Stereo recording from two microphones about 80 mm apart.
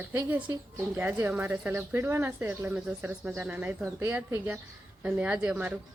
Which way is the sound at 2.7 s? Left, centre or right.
Centre.